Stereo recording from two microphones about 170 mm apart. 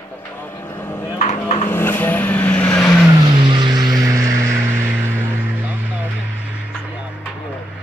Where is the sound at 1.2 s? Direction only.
40° left (ahead or behind).